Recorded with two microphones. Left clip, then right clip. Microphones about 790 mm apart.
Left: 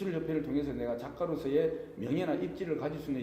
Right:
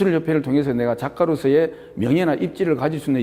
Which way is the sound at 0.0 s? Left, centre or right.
Right.